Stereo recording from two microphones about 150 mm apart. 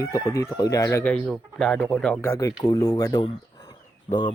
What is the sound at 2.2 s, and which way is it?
Speech, 20° left (ahead or behind).